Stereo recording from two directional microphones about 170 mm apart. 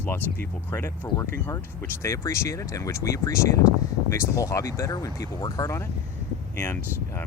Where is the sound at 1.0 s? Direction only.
20° left (ahead or behind).